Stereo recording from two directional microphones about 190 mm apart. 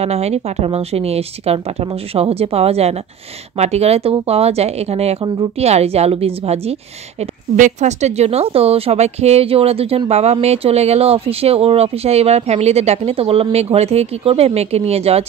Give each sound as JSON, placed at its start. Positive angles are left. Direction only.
{"t": 0.0, "sound": "speech", "side_deg": -35}